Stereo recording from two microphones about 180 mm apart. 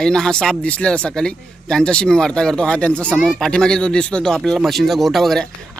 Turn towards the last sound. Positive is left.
turn(degrees=0)  # may be behind; listen again after turning